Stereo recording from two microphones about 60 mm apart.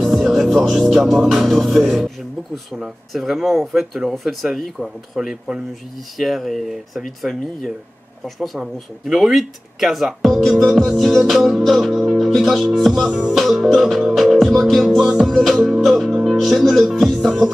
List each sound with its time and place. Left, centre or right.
0.0 s music: centre
3.1 s speech: centre
16.3 s music: centre